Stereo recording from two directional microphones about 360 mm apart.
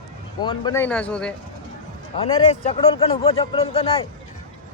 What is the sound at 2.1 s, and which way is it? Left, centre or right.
Speech, centre.